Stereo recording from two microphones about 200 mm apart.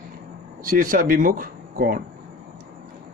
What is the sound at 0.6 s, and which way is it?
Speech, 45° right (ahead or behind).